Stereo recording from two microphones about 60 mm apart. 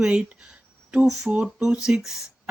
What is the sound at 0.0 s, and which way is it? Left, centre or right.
A woman's voice, centre.